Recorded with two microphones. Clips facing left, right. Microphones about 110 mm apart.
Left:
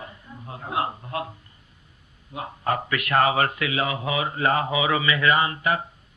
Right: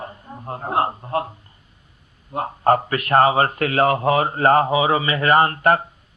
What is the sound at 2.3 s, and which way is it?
Speech, 45° right (ahead or behind).